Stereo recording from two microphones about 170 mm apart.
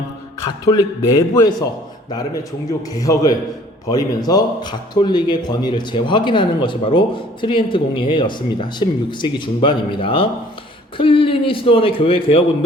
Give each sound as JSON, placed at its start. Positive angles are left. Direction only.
{"t": 0.6, "sound": "a man's voice", "side_deg": 20}